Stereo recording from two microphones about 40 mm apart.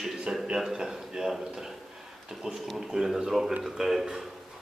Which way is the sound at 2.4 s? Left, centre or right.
Right.